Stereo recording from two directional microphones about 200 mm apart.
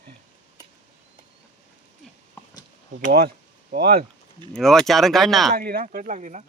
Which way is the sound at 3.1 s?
50° right (ahead or behind).